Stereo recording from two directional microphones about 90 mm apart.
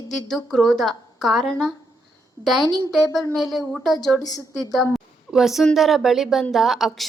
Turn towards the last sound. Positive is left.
turn(degrees=-5)  # may be behind; listen again after turning